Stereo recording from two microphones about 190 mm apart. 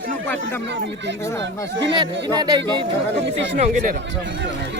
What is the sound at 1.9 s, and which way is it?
Speech, 25° right (ahead or behind).